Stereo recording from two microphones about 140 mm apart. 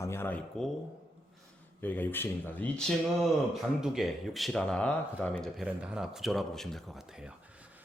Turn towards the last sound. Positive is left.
turn(degrees=-10)  # may be behind; listen again after turning